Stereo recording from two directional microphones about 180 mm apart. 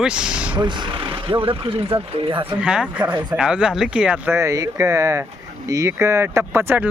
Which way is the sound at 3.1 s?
25° right (ahead or behind).